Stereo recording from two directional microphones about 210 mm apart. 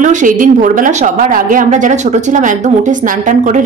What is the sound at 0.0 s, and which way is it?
A woman's voice, 35° right (ahead or behind).